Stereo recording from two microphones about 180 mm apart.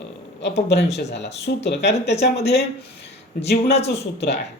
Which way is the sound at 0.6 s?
70° left (ahead or behind).